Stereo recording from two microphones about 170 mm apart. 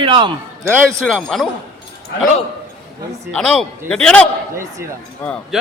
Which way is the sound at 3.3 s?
5° left (ahead or behind).